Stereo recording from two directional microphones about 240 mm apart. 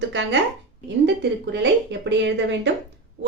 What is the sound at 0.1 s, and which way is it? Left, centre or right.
A woman's voice, right.